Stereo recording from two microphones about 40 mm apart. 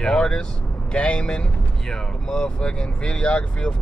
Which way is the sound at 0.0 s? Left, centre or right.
Left.